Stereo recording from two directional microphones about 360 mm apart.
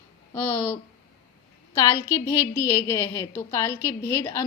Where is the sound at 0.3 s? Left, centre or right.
Centre.